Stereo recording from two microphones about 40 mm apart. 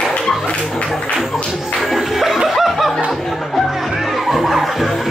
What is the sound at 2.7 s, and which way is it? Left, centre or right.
Music, centre.